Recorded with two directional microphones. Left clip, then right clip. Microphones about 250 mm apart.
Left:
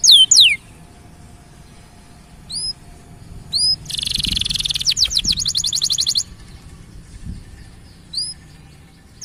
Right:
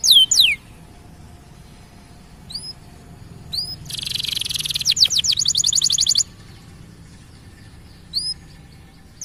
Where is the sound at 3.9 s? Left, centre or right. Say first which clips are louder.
Left 4 dB; centre.